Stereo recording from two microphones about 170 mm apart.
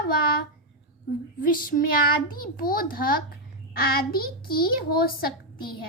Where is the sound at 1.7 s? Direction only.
55° left (ahead or behind).